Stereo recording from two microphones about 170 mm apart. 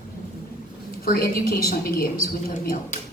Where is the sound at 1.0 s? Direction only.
60° left (ahead or behind).